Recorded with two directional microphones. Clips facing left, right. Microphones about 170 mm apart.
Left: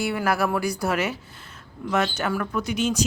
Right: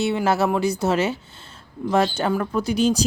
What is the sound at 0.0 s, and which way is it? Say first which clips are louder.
Speech: right 3 dB; 25° right (ahead or behind).